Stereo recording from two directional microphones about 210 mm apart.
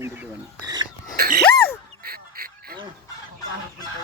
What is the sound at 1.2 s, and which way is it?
Dog, 45° right (ahead or behind).